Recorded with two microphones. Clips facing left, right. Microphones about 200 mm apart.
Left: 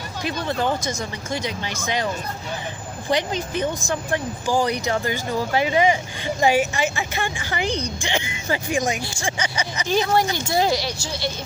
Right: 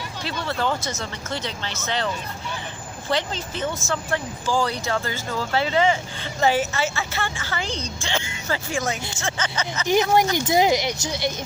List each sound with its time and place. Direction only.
0.4 s speech: 15° left (ahead or behind)
3.1 s speech: 15° left (ahead or behind)
9.8 s speech: 15° right (ahead or behind)